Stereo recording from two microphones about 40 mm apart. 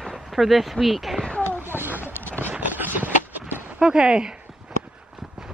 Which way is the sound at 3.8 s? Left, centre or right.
Centre.